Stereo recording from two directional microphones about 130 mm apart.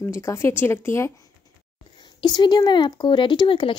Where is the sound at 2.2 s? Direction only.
35° left (ahead or behind).